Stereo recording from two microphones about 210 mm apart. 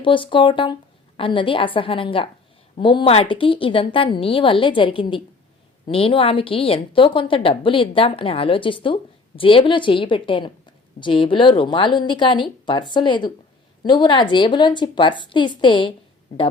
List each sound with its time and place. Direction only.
0.0 s a woman's voice: 25° left (ahead or behind)